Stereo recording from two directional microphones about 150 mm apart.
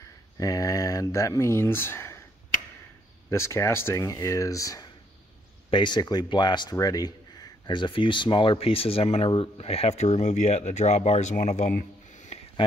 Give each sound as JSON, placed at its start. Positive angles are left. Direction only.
{"t": 0.4, "sound": "speech", "side_deg": 20}
{"t": 3.3, "sound": "speech", "side_deg": 15}